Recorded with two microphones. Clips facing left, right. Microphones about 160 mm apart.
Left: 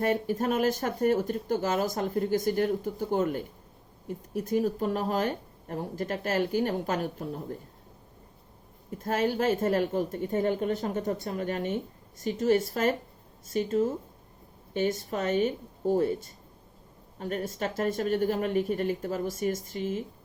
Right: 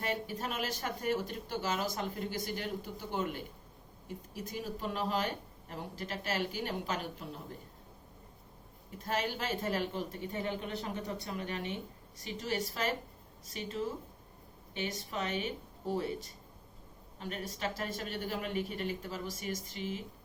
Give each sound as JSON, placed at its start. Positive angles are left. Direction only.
{"t": 0.0, "sound": "a woman's voice", "side_deg": 45}
{"t": 9.0, "sound": "a woman's voice", "side_deg": 45}
{"t": 17.2, "sound": "a woman's voice", "side_deg": 45}